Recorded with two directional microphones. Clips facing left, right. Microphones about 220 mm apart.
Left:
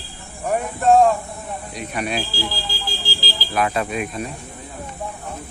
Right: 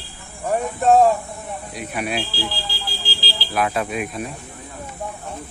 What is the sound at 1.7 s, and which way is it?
Speech, 5° right (ahead or behind).